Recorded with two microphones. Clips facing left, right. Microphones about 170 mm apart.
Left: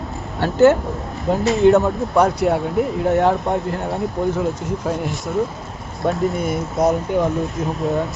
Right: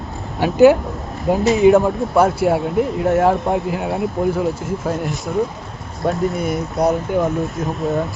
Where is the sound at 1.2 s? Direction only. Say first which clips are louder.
Right 2 dB; centre (ahead or behind).